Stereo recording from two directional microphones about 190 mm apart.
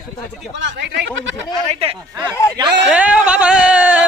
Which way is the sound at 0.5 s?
70° right (ahead or behind).